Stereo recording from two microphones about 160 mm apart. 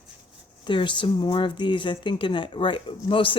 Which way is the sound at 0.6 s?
30° left (ahead or behind).